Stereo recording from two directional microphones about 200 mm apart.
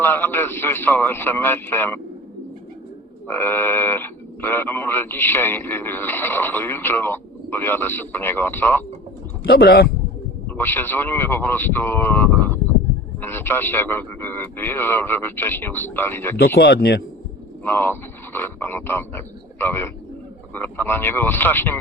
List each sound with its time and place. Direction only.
0.0 s speech: 10° left (ahead or behind)
3.2 s speech: 10° left (ahead or behind)
9.4 s speech: 50° left (ahead or behind)
10.5 s speech: 10° left (ahead or behind)
16.4 s speech: 55° left (ahead or behind)
17.6 s speech: 10° left (ahead or behind)